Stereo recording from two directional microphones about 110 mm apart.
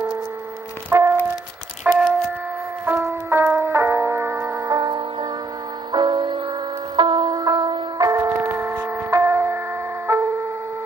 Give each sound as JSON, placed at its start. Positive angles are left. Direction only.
{"t": 0.8, "sound": "music", "side_deg": -20}
{"t": 4.6, "sound": "music", "side_deg": -40}
{"t": 8.0, "sound": "music", "side_deg": -30}
{"t": 10.0, "sound": "a sound", "side_deg": -25}